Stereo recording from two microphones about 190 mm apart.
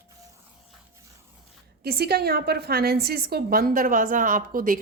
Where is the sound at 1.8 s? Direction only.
55° right (ahead or behind).